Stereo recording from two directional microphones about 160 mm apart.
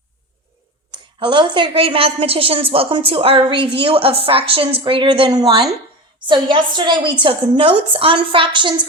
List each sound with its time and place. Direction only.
0.9 s a woman's voice: 30° right (ahead or behind)